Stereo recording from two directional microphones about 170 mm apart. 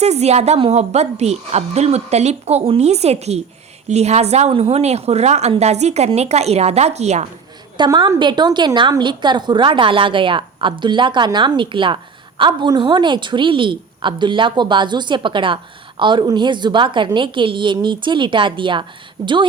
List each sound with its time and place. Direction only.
0.0 s a woman's voice: 40° right (ahead or behind)
7.8 s a woman's voice: 25° right (ahead or behind)